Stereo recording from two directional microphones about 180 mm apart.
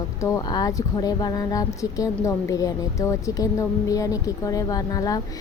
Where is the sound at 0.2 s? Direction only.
15° left (ahead or behind).